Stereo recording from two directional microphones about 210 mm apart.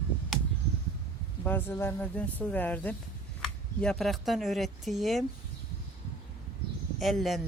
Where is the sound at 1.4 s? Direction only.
10° left (ahead or behind).